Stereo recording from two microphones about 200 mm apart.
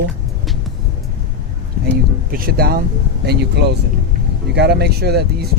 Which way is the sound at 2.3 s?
50° right (ahead or behind).